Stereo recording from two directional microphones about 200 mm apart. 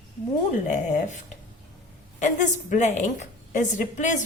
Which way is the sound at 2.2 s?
40° left (ahead or behind).